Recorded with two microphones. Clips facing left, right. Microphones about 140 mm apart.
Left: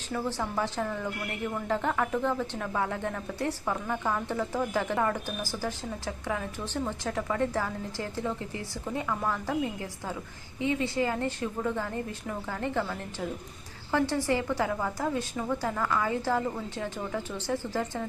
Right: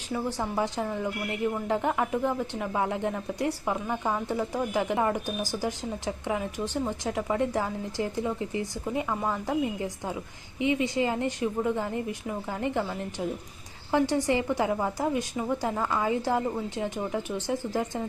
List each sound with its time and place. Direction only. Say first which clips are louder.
0.1 s a woman's voice: right 2 dB; 15° right (ahead or behind)